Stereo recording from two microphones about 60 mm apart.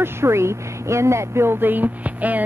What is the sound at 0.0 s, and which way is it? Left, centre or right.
Speech, right.